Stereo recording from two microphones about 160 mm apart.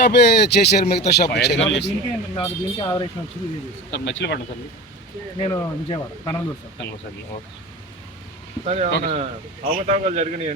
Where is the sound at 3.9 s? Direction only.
90° left.